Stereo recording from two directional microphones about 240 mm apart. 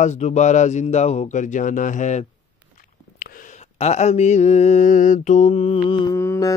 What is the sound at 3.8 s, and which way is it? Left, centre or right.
Mantra, left.